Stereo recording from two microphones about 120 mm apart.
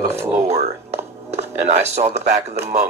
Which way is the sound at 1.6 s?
70° right (ahead or behind).